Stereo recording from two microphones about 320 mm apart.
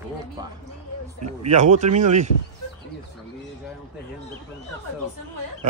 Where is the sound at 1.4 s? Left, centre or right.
Right.